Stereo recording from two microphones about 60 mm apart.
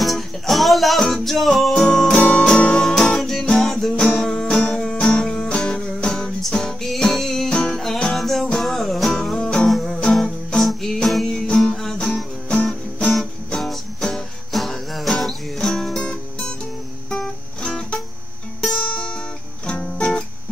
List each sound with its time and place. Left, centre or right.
0.0 s music: centre
9.7 s music: centre
13.1 s music: centre
17.6 s music: centre